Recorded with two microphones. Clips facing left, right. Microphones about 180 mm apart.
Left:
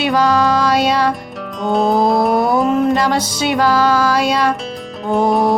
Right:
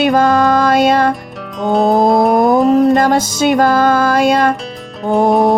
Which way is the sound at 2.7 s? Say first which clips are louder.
Right 5 dB; 35° right (ahead or behind).